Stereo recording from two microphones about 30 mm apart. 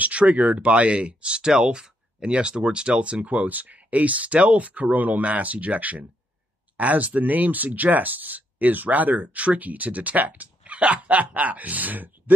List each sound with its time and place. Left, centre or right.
0.0 s speech: right
3.0 s speech: right
4.9 s speech: right
5.2 s speech: right
10.6 s speech: right